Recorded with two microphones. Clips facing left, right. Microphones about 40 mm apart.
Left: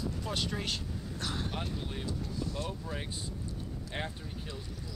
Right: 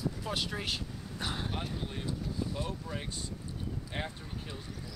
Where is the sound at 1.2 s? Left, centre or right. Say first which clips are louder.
Right 1 dB; centre.